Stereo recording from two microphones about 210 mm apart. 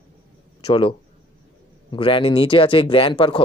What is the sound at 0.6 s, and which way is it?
Speech, 25° left (ahead or behind).